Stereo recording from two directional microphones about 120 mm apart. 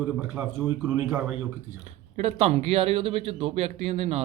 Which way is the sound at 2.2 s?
60° right (ahead or behind).